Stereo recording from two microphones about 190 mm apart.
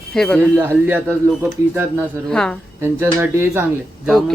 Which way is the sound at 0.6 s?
10° right (ahead or behind).